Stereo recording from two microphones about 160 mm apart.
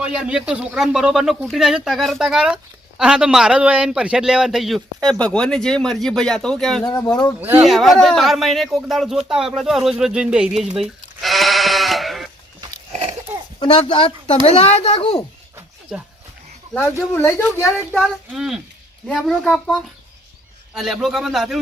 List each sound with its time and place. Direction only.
0.0 s a man's voice: 5° right (ahead or behind)
6.8 s speech: 25° left (ahead or behind)
7.3 s speech: 10° right (ahead or behind)
7.7 s a man's voice: centre (ahead or behind)
10.8 s bleat: centre (ahead or behind)
13.6 s speech: 30° left (ahead or behind)
16.7 s speech: 15° left (ahead or behind)
17.9 s a man's voice: centre (ahead or behind)